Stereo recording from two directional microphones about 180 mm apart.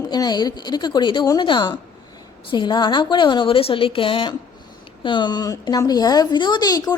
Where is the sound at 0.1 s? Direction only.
25° left (ahead or behind).